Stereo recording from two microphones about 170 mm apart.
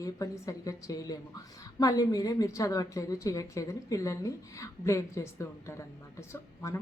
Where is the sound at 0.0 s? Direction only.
20° left (ahead or behind).